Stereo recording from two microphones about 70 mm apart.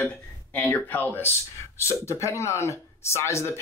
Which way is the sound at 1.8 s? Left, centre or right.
Left.